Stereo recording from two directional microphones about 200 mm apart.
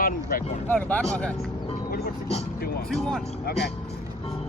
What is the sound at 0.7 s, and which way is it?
Speech, 10° left (ahead or behind).